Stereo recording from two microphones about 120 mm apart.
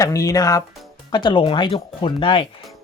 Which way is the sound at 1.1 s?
40° left (ahead or behind).